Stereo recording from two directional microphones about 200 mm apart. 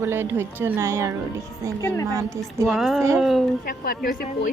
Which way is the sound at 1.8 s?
15° left (ahead or behind).